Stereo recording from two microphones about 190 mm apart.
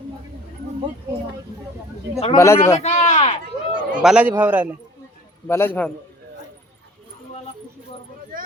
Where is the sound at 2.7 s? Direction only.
35° left (ahead or behind).